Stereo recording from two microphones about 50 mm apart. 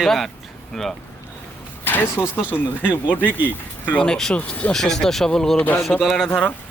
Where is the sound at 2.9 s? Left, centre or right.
Left.